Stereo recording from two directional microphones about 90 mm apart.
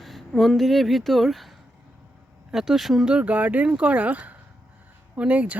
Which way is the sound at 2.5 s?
5° right (ahead or behind).